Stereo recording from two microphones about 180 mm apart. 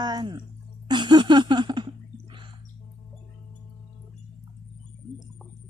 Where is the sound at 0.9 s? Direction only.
25° right (ahead or behind).